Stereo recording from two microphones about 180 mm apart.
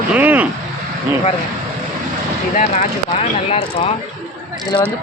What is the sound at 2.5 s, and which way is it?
Speech, 45° left (ahead or behind).